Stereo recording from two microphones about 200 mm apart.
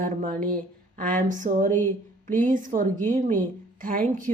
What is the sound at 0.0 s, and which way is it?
A woman's voice, 40° right (ahead or behind).